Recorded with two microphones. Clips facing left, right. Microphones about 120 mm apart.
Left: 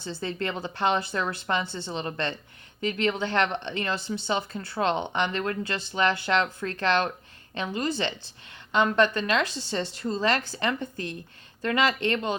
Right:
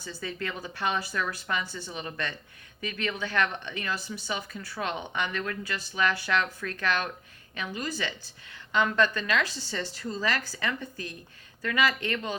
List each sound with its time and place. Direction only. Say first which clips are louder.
0.0 s speech: left 4 dB; 25° left (ahead or behind)